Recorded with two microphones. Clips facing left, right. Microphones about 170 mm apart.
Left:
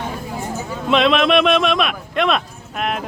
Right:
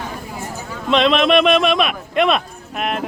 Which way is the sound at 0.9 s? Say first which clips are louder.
Even; centre (ahead or behind).